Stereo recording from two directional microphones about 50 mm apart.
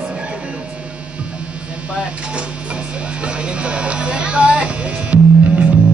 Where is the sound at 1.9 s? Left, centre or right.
Right.